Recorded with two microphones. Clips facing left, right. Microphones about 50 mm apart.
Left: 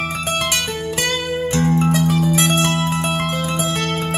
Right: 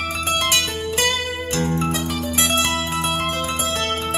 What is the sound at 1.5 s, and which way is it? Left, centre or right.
Music, left.